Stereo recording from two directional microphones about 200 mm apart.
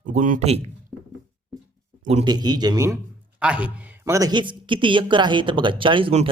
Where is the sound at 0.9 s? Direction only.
Centre (ahead or behind).